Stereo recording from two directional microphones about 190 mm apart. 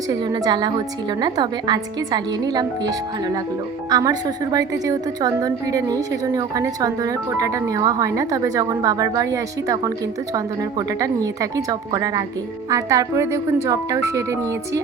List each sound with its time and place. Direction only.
0.1 s a woman's voice: 20° right (ahead or behind)